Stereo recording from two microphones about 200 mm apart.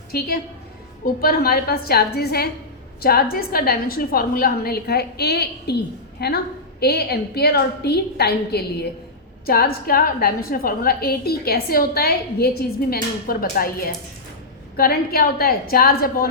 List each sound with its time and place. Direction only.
0.1 s a woman's voice: 50° left (ahead or behind)
14.8 s a woman's voice: 50° left (ahead or behind)